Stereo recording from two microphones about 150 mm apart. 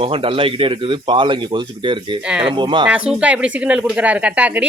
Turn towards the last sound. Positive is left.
turn(degrees=-10)  # may be behind; listen again after turning